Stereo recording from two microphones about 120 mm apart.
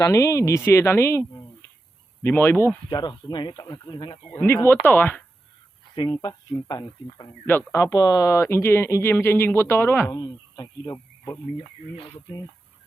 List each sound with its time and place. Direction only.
0.0 s speech: 25° left (ahead or behind)
2.2 s speech: 20° left (ahead or behind)
2.9 s speech: 35° left (ahead or behind)
4.4 s speech: 20° left (ahead or behind)
6.1 s speech: 30° left (ahead or behind)
10.2 s speech: 35° left (ahead or behind)